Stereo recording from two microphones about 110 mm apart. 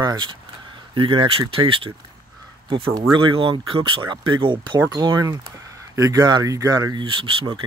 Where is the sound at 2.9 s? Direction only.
50° right (ahead or behind).